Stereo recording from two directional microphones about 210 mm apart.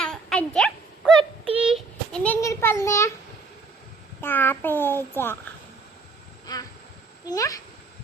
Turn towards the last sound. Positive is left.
turn(degrees=15)  # may be behind; listen again after turning